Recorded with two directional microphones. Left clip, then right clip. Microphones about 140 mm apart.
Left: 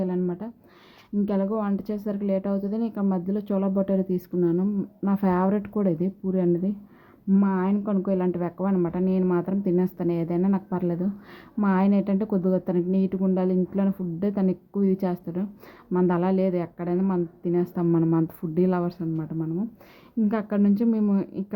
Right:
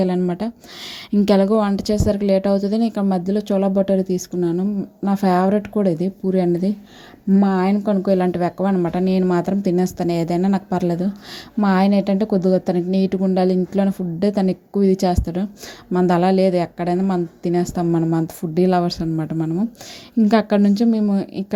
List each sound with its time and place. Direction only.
0.3 s speech: 45° right (ahead or behind); by 19.0 s 30° right (ahead or behind)
19.1 s speech: 45° right (ahead or behind); by 21.4 s 20° right (ahead or behind)